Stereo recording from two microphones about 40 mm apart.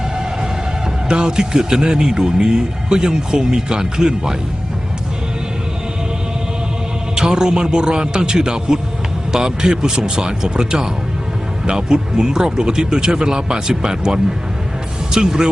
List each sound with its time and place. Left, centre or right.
1.0 s speech: right
7.2 s speech: centre